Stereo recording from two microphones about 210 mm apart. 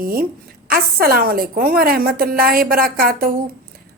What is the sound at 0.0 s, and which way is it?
A woman's voice, 45° right (ahead or behind).